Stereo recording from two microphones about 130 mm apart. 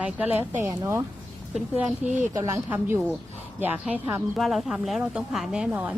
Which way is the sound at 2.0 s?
10° right (ahead or behind).